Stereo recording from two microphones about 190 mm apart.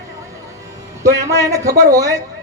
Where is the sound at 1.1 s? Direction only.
15° right (ahead or behind).